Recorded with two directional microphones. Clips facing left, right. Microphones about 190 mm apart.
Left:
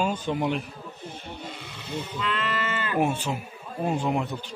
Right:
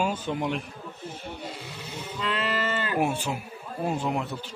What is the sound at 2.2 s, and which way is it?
Sheep, 35° right (ahead or behind).